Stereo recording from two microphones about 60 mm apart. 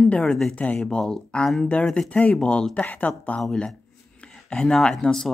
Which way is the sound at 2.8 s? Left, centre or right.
Left.